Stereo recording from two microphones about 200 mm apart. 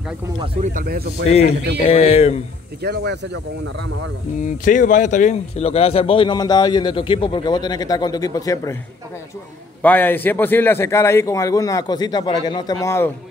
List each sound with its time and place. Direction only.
0.7 s speech: 50° right (ahead or behind)
1.2 s speech: 30° left (ahead or behind)
2.8 s speech: 55° right (ahead or behind)
4.4 s a man's voice: 40° left (ahead or behind); by 8.7 s 15° left (ahead or behind)
9.8 s a man's voice: 10° left (ahead or behind)